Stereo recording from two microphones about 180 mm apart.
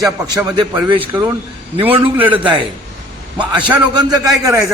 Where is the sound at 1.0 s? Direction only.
10° right (ahead or behind).